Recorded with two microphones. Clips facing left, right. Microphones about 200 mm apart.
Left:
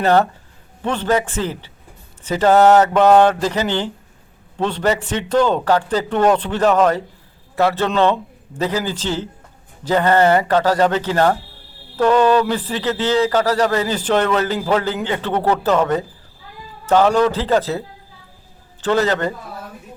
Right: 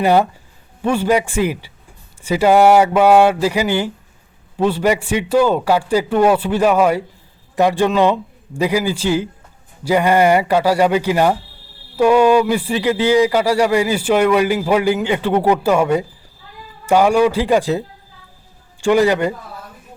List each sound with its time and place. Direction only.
0.0 s a man's voice: 10° right (ahead or behind)